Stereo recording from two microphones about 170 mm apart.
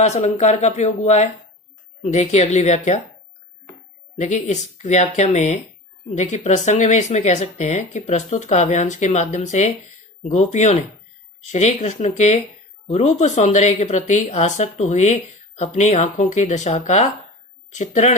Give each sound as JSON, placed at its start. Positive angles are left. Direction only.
{"t": 0.0, "sound": "speech", "side_deg": 40}
{"t": 4.2, "sound": "speech", "side_deg": 45}